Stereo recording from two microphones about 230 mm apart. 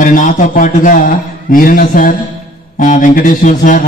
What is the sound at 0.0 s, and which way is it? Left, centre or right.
A man's voice, left.